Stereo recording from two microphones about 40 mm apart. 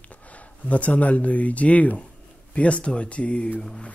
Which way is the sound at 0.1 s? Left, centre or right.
Left.